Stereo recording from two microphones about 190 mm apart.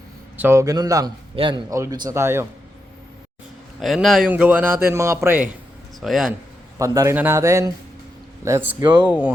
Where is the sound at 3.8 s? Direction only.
Centre (ahead or behind).